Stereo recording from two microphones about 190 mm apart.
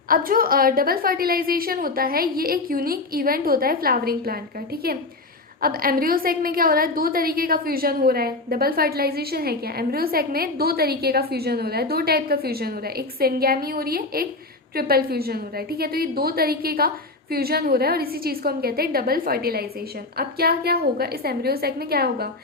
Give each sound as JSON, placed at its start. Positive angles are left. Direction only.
{"t": 0.1, "sound": "a woman's voice", "side_deg": -50}
{"t": 5.6, "sound": "a woman's voice", "side_deg": -50}